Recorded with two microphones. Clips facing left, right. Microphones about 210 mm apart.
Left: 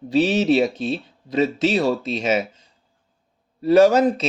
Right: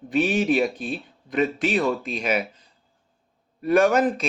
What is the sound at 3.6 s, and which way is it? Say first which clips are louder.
Speech: left 4 dB; 25° left (ahead or behind).